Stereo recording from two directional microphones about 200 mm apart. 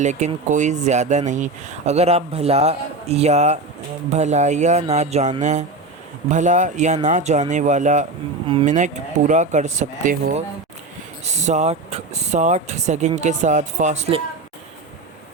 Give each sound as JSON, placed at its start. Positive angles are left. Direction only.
{"t": 0.0, "sound": "speech", "side_deg": -35}
{"t": 11.4, "sound": "speech", "side_deg": -35}